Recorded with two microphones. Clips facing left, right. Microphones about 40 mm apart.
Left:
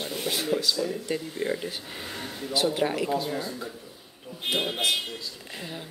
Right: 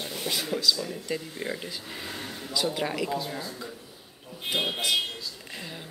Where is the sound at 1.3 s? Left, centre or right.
Centre.